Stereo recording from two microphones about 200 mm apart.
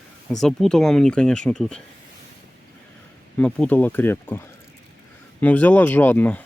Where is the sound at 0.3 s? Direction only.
Centre (ahead or behind).